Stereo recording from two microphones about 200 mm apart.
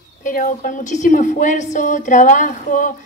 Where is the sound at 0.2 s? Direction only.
40° left (ahead or behind).